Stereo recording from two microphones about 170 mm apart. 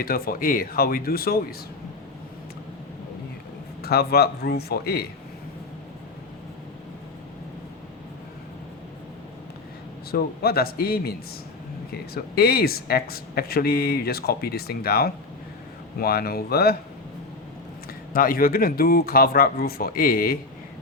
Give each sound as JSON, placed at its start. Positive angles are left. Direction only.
{"t": 0.0, "sound": "speech", "side_deg": 60}
{"t": 3.8, "sound": "speech", "side_deg": 65}
{"t": 10.1, "sound": "speech", "side_deg": 65}
{"t": 18.1, "sound": "speech", "side_deg": 55}